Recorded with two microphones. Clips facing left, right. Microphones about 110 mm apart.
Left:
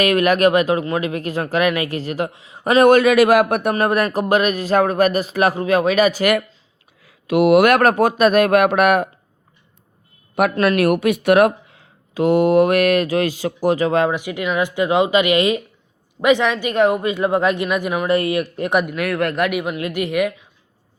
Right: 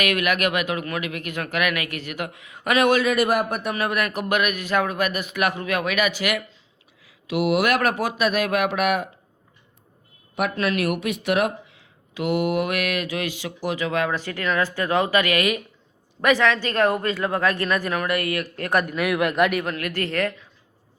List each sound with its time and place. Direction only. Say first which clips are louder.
0.0 s a man's voice: left 8 dB; 35° left (ahead or behind)
2.8 s a man's voice: left 8 dB; 55° left (ahead or behind)
10.5 s a man's voice: left 7 dB; 50° left (ahead or behind); by 14.1 s 35° left (ahead or behind)
14.1 s speech: left 3 dB; 15° left (ahead or behind)
18.9 s speech: left 2 dB; centre (ahead or behind)
19.5 s speech: left 3 dB; 10° left (ahead or behind)